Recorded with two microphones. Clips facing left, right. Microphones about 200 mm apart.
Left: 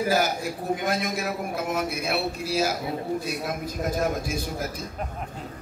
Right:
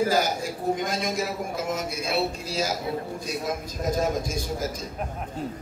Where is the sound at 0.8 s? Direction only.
60° left (ahead or behind).